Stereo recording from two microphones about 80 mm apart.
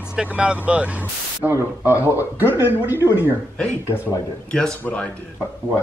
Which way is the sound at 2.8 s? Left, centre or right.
Right.